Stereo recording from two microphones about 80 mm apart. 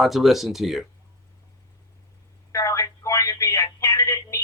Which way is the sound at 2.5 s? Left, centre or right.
Left.